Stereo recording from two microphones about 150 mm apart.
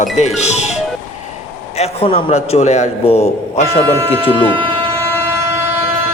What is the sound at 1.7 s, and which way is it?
A man's voice, 45° left (ahead or behind).